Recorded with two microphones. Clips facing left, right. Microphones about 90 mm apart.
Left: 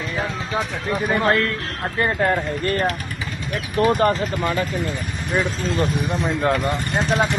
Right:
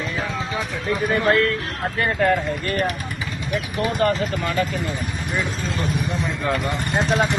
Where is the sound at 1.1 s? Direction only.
20° left (ahead or behind).